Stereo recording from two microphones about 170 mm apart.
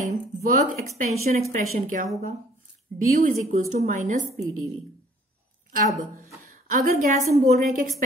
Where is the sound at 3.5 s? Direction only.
45° right (ahead or behind).